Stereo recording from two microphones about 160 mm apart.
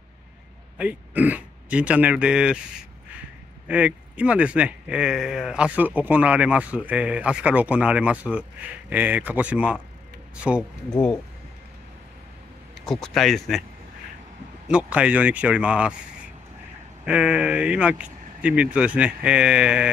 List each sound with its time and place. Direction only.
0.7 s speech: 10° right (ahead or behind)
3.6 s a man's voice: 10° right (ahead or behind)
12.8 s speech: centre (ahead or behind)
14.7 s a man's voice: 5° right (ahead or behind)
17.0 s a man's voice: 5° right (ahead or behind)